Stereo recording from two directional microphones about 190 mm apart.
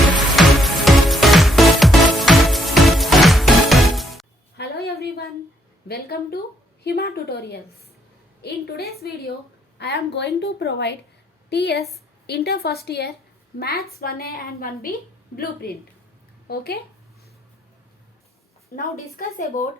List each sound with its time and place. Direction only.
0.3 s music: centre (ahead or behind)
4.5 s a sound: 55° left (ahead or behind)
5.9 s a woman's voice: 55° left (ahead or behind)
18.8 s a woman's voice: 45° left (ahead or behind)